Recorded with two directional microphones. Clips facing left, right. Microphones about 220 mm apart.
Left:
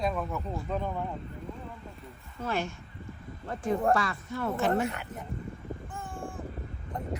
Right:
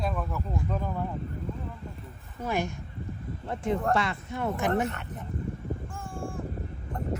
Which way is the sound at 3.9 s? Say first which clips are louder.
Right 1 dB; 25° right (ahead or behind).